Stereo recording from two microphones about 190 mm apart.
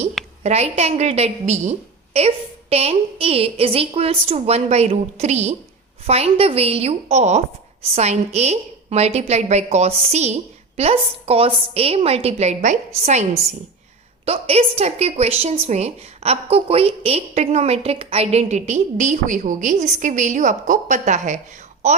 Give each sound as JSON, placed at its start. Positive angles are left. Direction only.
{"t": 0.4, "sound": "a woman's voice", "side_deg": -35}